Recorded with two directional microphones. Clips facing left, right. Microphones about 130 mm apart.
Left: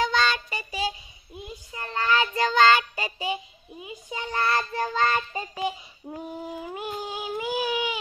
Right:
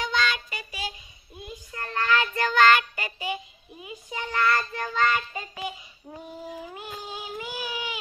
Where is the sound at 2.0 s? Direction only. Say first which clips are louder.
Left 2 dB; 30° left (ahead or behind).